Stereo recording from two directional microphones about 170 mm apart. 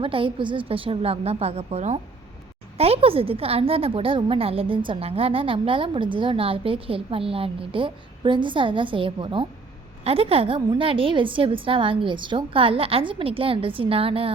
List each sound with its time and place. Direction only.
0.0 s a woman's voice: 30° right (ahead or behind)